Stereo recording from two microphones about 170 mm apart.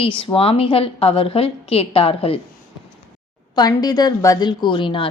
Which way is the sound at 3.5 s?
25° left (ahead or behind).